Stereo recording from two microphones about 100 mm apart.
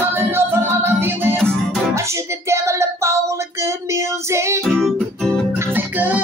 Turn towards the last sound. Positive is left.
turn(degrees=-15)  # may be behind; listen again after turning